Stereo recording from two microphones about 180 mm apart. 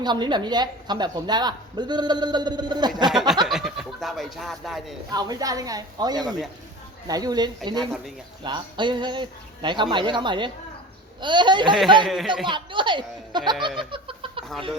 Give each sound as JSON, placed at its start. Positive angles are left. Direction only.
{"t": 0.0, "sound": "a woman's voice", "side_deg": -25}
{"t": 3.1, "sound": "snicker", "side_deg": 0}
{"t": 3.4, "sound": "speech", "side_deg": 0}
{"t": 5.1, "sound": "a woman's voice", "side_deg": -20}
{"t": 12.0, "sound": "a man's voice", "side_deg": 0}
{"t": 12.5, "sound": "a woman's voice", "side_deg": -25}
{"t": 13.7, "sound": "giggle", "side_deg": -30}